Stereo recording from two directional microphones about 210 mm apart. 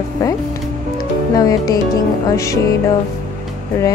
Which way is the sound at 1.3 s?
15° left (ahead or behind).